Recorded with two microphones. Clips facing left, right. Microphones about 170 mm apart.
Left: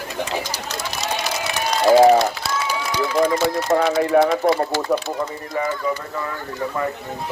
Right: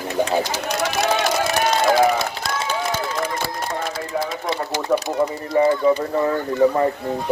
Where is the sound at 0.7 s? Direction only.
70° right (ahead or behind).